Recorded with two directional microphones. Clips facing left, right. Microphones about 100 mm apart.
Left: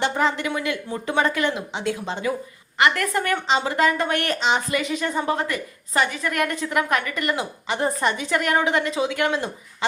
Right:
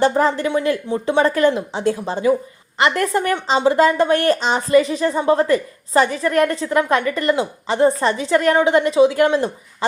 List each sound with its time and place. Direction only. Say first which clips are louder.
0.0 s a woman's voice: right 6 dB; 40° right (ahead or behind)